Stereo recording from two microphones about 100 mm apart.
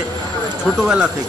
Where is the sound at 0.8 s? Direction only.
10° right (ahead or behind).